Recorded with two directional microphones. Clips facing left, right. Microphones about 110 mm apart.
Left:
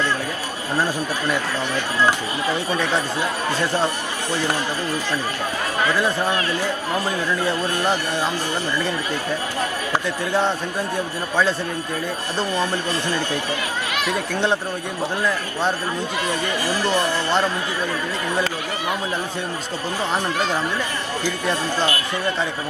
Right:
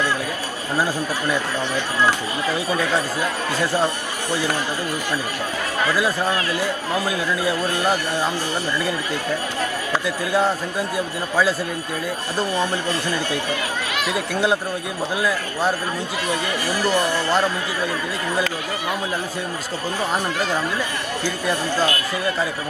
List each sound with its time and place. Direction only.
6.9 s a man's voice: 10° right (ahead or behind)
10.3 s a man's voice: 10° right (ahead or behind)
14.0 s a man's voice: 10° right (ahead or behind)